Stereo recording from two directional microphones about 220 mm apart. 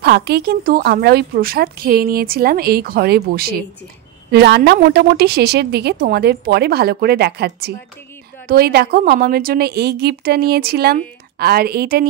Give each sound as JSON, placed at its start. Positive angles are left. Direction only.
{"t": 0.0, "sound": "a woman's voice", "side_deg": -50}